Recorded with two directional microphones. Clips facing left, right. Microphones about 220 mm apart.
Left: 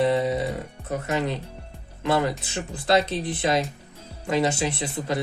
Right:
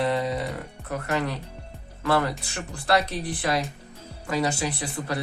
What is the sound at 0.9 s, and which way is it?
Speech, 20° left (ahead or behind).